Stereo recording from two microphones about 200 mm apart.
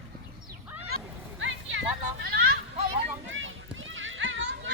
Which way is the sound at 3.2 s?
75° right (ahead or behind).